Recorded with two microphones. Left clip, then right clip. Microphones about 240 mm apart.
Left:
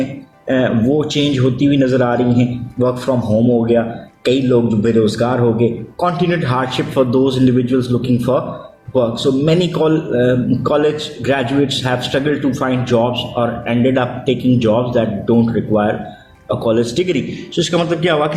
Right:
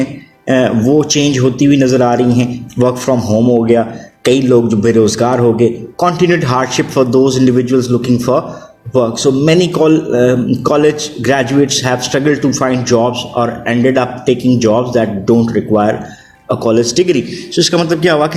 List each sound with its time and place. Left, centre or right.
0.4 s a man's voice: right